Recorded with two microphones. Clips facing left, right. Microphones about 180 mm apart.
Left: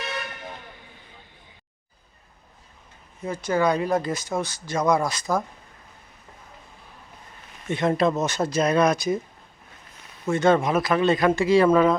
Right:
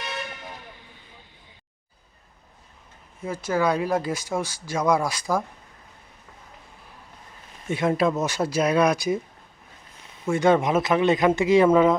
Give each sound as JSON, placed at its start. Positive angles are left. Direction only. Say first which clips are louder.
{"t": 3.2, "sound": "speech", "louder": "left 1 dB", "side_deg": -5}
{"t": 7.7, "sound": "speech", "louder": "even", "side_deg": -10}
{"t": 10.2, "sound": "speech", "louder": "even", "side_deg": -10}